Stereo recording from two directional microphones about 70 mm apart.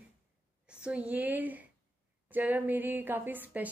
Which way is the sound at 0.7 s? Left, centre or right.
Centre.